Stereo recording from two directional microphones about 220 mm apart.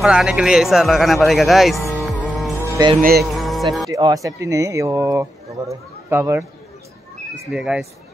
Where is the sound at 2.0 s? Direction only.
Centre (ahead or behind).